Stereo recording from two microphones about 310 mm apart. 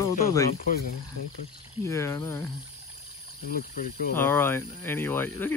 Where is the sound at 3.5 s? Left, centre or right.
Left.